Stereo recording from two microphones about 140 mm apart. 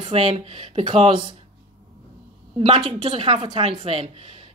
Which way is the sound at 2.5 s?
35° right (ahead or behind).